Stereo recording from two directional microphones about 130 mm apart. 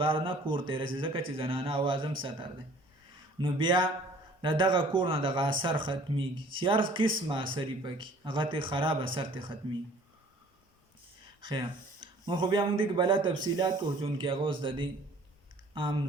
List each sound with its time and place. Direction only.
0.0 s speech: 40° right (ahead or behind)
11.3 s speech: 35° right (ahead or behind)